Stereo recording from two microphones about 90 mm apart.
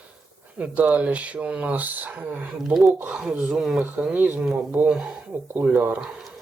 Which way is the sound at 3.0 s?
10° right (ahead or behind).